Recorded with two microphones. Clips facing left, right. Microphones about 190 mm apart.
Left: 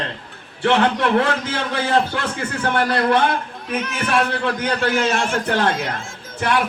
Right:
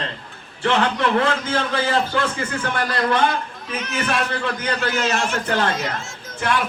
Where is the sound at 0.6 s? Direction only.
65° left (ahead or behind).